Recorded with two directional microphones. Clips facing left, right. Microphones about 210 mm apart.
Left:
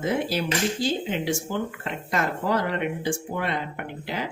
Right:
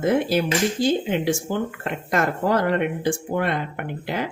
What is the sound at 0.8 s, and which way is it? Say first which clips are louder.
Speech: right 5 dB; 50° right (ahead or behind).